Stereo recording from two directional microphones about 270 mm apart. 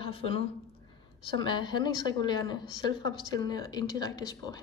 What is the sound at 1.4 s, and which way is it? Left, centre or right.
A woman's voice, centre.